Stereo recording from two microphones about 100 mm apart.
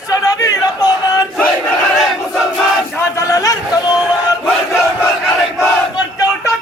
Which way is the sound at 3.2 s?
35° left (ahead or behind).